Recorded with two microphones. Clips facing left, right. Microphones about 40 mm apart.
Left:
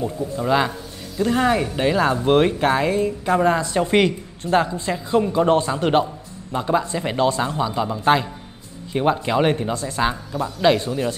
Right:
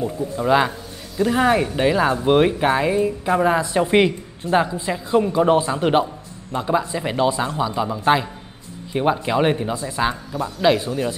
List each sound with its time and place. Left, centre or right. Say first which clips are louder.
0.0 s speech: right 1 dB; centre
3.5 s speech: right 1 dB; centre